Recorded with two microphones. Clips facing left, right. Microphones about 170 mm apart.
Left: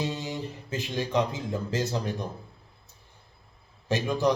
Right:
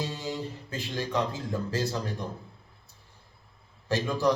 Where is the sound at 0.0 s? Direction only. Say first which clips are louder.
Left 1 dB; 20° left (ahead or behind).